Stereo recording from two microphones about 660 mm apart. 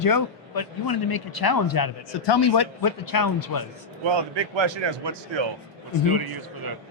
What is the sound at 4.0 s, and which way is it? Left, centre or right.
A man's voice, right.